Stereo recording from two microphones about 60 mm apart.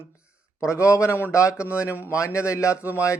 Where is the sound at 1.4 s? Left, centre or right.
Left.